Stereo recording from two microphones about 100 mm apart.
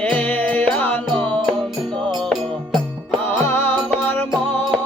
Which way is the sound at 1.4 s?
Centre (ahead or behind).